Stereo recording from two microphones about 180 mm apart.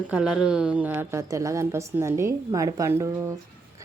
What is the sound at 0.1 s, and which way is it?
Speech, 5° right (ahead or behind).